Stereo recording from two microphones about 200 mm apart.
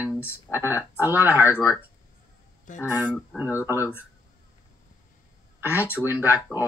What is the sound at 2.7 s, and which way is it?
Speech, 40° left (ahead or behind).